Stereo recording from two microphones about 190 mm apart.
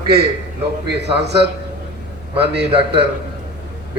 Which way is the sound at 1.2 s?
60° right (ahead or behind).